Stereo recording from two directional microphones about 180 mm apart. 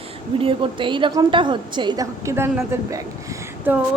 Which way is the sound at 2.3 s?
15° right (ahead or behind).